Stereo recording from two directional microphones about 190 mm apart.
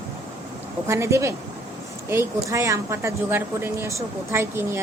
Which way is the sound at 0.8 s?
15° right (ahead or behind).